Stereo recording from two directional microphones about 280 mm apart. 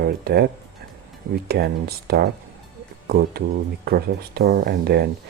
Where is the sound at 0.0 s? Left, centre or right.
Right.